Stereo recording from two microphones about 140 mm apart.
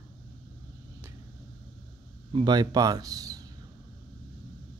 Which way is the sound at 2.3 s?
35° right (ahead or behind).